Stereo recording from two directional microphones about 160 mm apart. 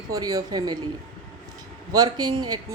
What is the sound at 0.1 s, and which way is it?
Speech, 25° right (ahead or behind).